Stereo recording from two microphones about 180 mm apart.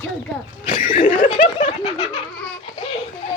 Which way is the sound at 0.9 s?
45° left (ahead or behind).